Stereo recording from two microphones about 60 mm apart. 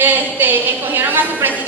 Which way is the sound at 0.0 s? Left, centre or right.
Right.